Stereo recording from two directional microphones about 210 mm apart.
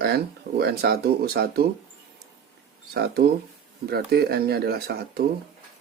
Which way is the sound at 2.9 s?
50° right (ahead or behind).